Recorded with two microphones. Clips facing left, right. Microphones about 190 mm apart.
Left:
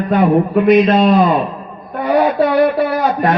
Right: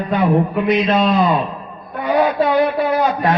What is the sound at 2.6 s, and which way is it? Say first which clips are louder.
Speech: left 2 dB; 60° left (ahead or behind).